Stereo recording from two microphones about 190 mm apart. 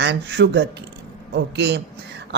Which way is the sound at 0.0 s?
65° right (ahead or behind).